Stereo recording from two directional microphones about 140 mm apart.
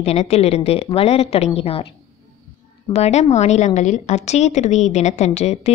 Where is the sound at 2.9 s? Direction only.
50° left (ahead or behind).